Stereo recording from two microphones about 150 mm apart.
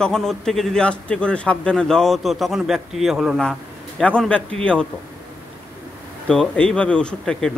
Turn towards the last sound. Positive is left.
turn(degrees=5)  # may be behind; listen again after turning